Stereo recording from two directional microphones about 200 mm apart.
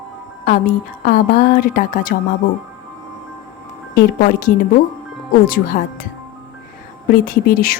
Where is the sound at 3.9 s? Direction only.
50° left (ahead or behind).